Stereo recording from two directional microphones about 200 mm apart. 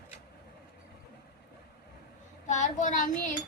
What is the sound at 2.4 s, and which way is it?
Speech, 35° left (ahead or behind).